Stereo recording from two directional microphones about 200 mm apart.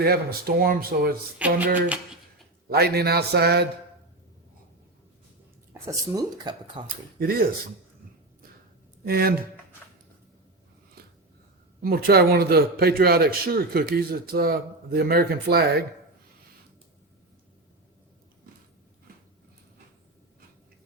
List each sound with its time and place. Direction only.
0.0 s a man's voice: 50° right (ahead or behind)
1.4 s speech: 5° right (ahead or behind)
2.6 s a man's voice: 50° right (ahead or behind)
5.7 s speech: 15° right (ahead or behind)
6.8 s a man's voice: 45° right (ahead or behind)
9.0 s a man's voice: 50° right (ahead or behind)
11.0 s a sound: 50° right (ahead or behind)
11.8 s a man's voice: 50° right (ahead or behind)